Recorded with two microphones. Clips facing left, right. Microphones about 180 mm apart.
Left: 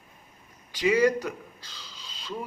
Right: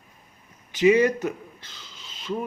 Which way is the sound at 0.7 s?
25° right (ahead or behind).